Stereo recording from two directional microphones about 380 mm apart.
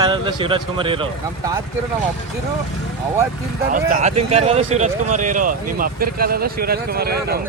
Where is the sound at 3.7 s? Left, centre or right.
Right.